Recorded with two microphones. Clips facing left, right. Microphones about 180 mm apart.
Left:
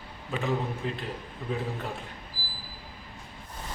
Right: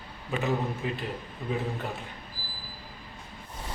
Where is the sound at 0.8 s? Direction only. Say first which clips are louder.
Right 1 dB; 5° right (ahead or behind).